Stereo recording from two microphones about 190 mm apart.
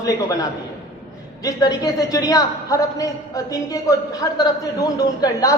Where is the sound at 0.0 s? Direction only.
20° left (ahead or behind).